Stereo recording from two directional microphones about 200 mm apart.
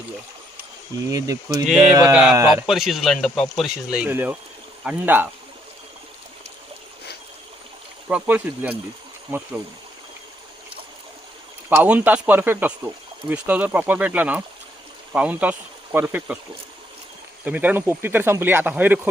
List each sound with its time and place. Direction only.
1.1 s speech: 15° right (ahead or behind)
8.0 s speech: 10° right (ahead or behind)
11.7 s speech: 5° right (ahead or behind)
17.4 s speech: 10° right (ahead or behind)